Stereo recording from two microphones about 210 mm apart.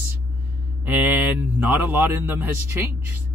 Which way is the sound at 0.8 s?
10° right (ahead or behind).